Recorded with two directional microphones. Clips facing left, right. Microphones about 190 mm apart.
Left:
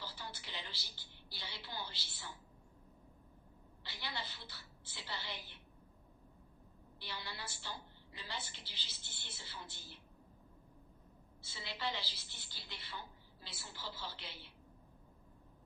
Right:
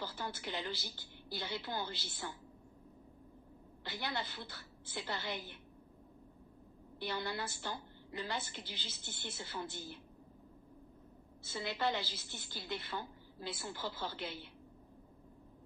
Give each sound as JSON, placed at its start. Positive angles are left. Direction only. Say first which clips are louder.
{"t": 0.0, "sound": "a woman's voice", "louder": "right 7 dB", "side_deg": -50}
{"t": 3.8, "sound": "a woman's voice", "louder": "right 6 dB", "side_deg": -50}
{"t": 7.0, "sound": "a woman's voice", "louder": "right 9 dB", "side_deg": -50}
{"t": 11.4, "sound": "a woman's voice", "louder": "right 7 dB", "side_deg": -50}